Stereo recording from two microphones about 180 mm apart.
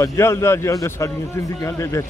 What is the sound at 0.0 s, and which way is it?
Speech, 15° left (ahead or behind).